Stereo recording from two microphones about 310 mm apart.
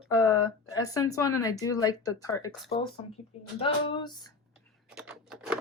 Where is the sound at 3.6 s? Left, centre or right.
Centre.